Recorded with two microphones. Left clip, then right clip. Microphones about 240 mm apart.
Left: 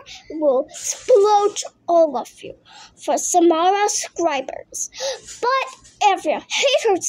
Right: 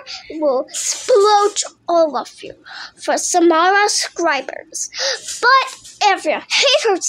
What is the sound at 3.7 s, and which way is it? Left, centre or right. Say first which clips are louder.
A woman's voice: right 5 dB; centre.